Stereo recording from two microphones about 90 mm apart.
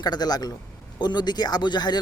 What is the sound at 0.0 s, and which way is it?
Speech, 50° left (ahead or behind).